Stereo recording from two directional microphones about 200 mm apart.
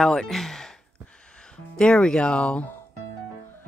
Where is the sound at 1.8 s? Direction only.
5° left (ahead or behind).